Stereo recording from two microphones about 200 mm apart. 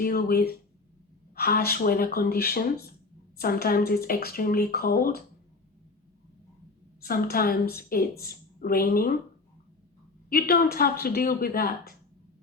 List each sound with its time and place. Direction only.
0.0 s speech: 50° left (ahead or behind)
7.0 s a woman's voice: 50° left (ahead or behind)
10.2 s speech: 50° left (ahead or behind)